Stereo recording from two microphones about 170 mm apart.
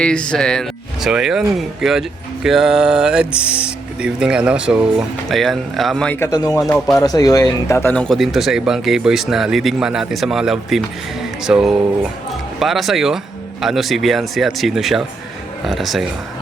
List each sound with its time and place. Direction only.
0.0 s speech: 5° left (ahead or behind)
6.1 s speech: 20° left (ahead or behind)
6.6 s speech: centre (ahead or behind)
6.9 s speech: 20° left (ahead or behind); by 16.0 s centre (ahead or behind)